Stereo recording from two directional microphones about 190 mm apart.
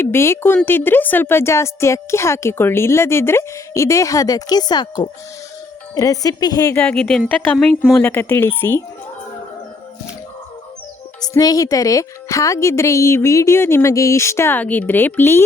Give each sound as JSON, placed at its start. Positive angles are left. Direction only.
{"t": 0.0, "sound": "a woman's voice", "side_deg": 15}
{"t": 6.7, "sound": "a woman's voice", "side_deg": 5}
{"t": 11.2, "sound": "a woman's voice", "side_deg": 20}